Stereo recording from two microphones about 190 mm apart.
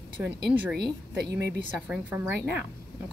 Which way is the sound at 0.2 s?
5° right (ahead or behind).